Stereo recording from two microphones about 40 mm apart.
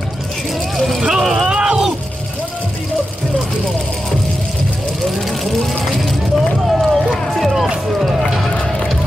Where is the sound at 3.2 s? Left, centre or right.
Centre.